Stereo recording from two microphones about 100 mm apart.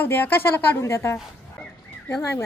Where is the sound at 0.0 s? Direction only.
20° left (ahead or behind).